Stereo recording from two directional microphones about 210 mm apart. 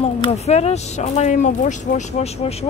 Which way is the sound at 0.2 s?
30° left (ahead or behind).